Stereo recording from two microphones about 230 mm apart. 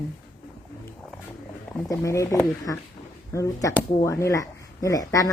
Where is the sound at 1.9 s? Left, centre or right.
Centre.